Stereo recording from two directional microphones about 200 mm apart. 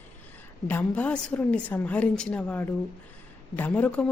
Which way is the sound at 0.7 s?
10° left (ahead or behind).